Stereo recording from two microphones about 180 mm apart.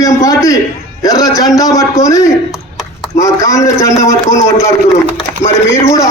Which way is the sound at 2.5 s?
Centre (ahead or behind).